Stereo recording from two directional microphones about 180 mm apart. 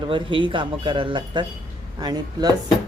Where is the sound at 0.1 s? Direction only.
30° right (ahead or behind).